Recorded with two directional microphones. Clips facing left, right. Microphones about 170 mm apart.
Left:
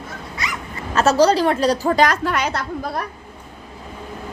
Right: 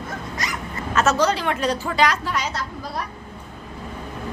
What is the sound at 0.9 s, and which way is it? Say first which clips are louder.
A woman's voice: left 5 dB; 35° left (ahead or behind).